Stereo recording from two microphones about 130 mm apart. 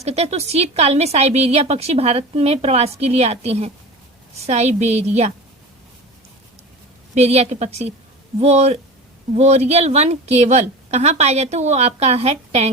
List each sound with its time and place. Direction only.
0.0 s a woman's voice: 55° right (ahead or behind)
7.1 s a woman's voice: 55° right (ahead or behind)